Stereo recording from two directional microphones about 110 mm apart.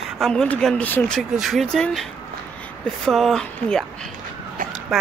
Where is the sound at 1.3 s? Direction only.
Centre (ahead or behind).